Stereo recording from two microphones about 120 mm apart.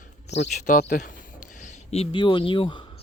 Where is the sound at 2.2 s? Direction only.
45° left (ahead or behind).